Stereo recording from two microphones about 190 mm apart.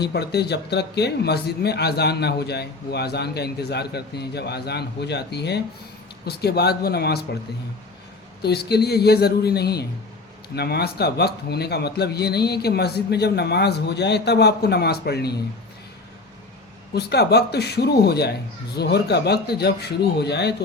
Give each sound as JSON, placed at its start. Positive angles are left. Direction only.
{"t": 0.0, "sound": "speech", "side_deg": 60}
{"t": 8.4, "sound": "speech", "side_deg": 60}
{"t": 16.9, "sound": "speech", "side_deg": 60}